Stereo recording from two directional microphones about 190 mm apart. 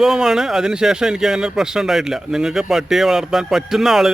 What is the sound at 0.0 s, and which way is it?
A man's voice, centre (ahead or behind).